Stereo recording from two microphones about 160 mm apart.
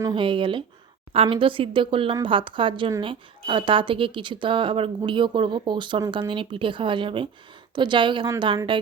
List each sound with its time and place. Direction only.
0.0 s a woman's voice: 30° right (ahead or behind)